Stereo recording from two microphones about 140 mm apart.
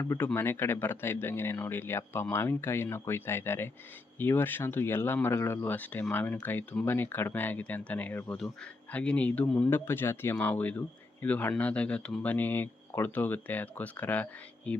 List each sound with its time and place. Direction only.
0.0 s speech: 20° left (ahead or behind)